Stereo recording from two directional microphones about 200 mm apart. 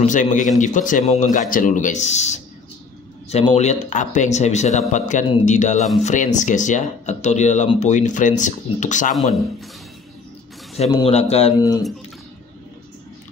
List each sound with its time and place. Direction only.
0.0 s speech: 40° left (ahead or behind)
10.8 s speech: 30° left (ahead or behind)